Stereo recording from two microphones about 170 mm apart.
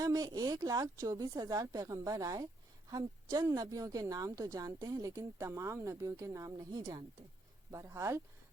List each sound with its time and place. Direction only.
0.0 s a woman's voice: 20° right (ahead or behind)